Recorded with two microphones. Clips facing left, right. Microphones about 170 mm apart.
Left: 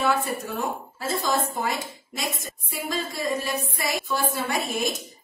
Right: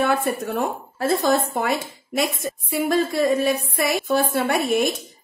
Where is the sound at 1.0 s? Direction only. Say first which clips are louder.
Right 6 dB; 60° right (ahead or behind).